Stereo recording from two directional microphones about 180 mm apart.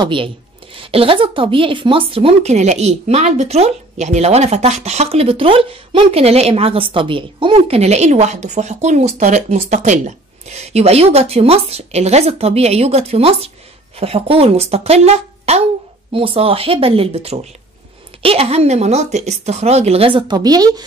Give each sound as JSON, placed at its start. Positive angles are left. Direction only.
{"t": 0.0, "sound": "speech", "side_deg": -30}